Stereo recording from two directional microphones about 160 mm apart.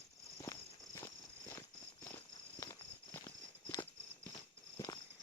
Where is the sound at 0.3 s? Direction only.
20° left (ahead or behind).